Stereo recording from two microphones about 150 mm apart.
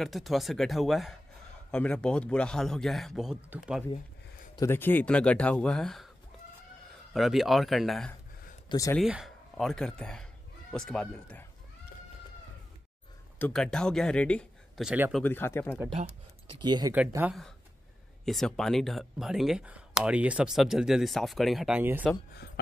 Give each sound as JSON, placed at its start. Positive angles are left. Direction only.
{"t": 0.0, "sound": "speech", "side_deg": 0}
{"t": 4.6, "sound": "speech", "side_deg": 15}
{"t": 7.2, "sound": "speech", "side_deg": 0}
{"t": 8.6, "sound": "speech", "side_deg": 20}
{"t": 8.9, "sound": "speech", "side_deg": -5}
{"t": 13.4, "sound": "speech", "side_deg": 5}
{"t": 14.9, "sound": "speech", "side_deg": -5}
{"t": 15.2, "sound": "speech", "side_deg": 15}
{"t": 16.4, "sound": "speech", "side_deg": -30}
{"t": 18.2, "sound": "speech", "side_deg": 0}